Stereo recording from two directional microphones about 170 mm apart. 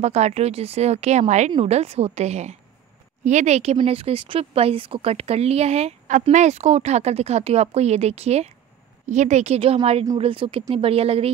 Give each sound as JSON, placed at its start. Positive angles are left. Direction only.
{"t": 0.0, "sound": "speech", "side_deg": -40}